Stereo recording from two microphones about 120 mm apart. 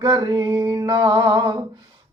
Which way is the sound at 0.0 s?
35° right (ahead or behind).